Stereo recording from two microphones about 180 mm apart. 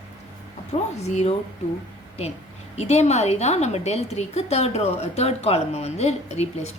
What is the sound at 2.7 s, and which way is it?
A woman's voice, 40° left (ahead or behind).